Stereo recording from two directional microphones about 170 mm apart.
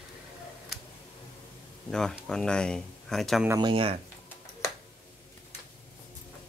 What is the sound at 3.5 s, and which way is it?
Speech, 30° right (ahead or behind).